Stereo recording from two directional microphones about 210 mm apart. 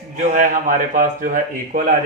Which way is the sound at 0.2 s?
40° right (ahead or behind).